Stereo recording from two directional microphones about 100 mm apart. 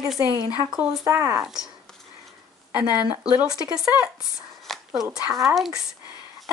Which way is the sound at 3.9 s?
40° left (ahead or behind).